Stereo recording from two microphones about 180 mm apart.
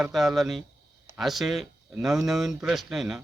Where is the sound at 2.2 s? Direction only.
Centre (ahead or behind).